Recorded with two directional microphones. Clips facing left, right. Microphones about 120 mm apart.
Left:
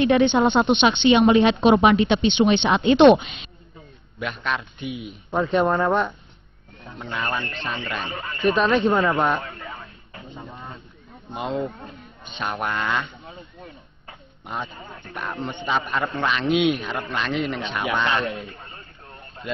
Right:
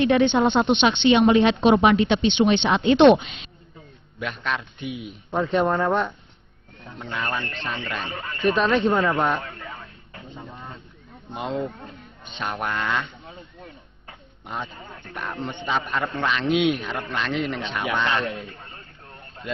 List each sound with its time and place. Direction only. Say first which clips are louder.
0.0 s speech: left 1 dB; 15° left (ahead or behind)
7.0 s speech: left 1 dB; 20° left (ahead or behind)